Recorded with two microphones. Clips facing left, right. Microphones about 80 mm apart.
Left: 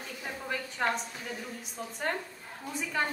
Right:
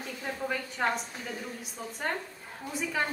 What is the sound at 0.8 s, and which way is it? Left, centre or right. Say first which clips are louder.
Speech: right 1 dB; centre.